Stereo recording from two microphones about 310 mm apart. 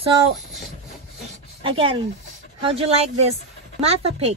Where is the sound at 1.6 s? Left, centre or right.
Centre.